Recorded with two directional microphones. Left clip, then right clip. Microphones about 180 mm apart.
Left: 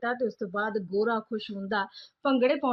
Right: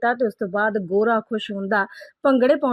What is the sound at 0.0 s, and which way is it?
Speech, 35° right (ahead or behind).